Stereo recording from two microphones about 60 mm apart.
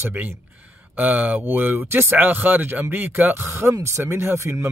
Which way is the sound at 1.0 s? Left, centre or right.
Right.